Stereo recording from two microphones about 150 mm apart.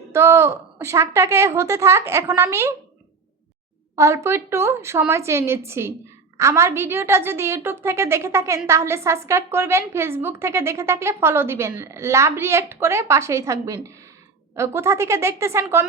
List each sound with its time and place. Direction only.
0.1 s a woman's voice: 20° right (ahead or behind)
3.9 s a woman's voice: 20° right (ahead or behind)